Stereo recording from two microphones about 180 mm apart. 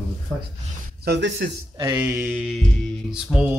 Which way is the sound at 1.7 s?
20° right (ahead or behind).